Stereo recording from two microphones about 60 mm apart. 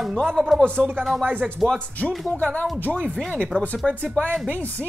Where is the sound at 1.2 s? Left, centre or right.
Right.